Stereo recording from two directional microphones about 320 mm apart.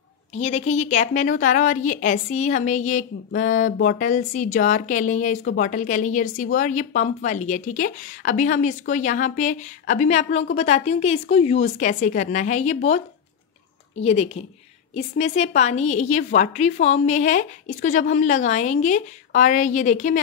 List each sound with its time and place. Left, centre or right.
0.3 s a woman's voice: left